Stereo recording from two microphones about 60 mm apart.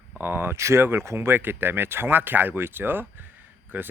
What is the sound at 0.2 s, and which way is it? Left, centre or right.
Speech, right.